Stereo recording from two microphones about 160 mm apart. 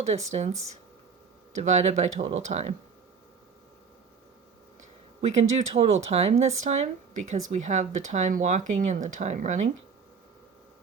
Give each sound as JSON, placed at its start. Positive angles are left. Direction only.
{"t": 0.0, "sound": "speech", "side_deg": -45}
{"t": 1.7, "sound": "speech", "side_deg": -45}
{"t": 5.3, "sound": "speech", "side_deg": -40}